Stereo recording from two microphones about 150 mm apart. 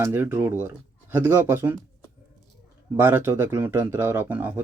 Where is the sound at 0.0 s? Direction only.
15° right (ahead or behind).